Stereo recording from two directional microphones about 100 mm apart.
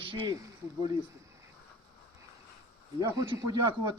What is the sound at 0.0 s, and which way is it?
Speech, 55° right (ahead or behind).